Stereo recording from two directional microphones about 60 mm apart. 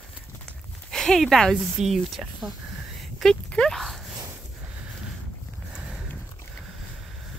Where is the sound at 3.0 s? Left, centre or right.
Centre.